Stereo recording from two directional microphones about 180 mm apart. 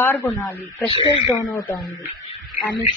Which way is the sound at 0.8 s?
30° left (ahead or behind).